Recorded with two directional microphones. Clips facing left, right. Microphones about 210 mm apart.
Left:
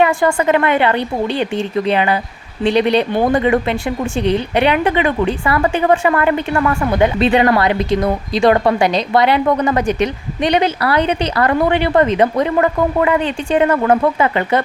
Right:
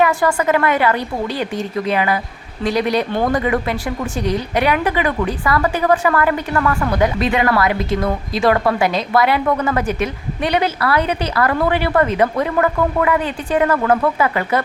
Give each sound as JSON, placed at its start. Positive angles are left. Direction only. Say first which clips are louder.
{"t": 0.0, "sound": "a woman's voice", "louder": "left 2 dB", "side_deg": 25}
{"t": 3.1, "sound": "a woman's voice", "louder": "left 4 dB", "side_deg": 15}